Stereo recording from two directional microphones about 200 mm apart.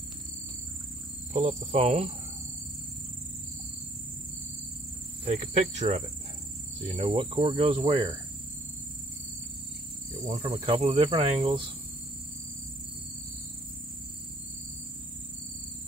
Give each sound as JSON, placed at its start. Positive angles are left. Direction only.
{"t": 1.3, "sound": "speech", "side_deg": -35}
{"t": 5.2, "sound": "speech", "side_deg": -35}
{"t": 10.2, "sound": "speech", "side_deg": -35}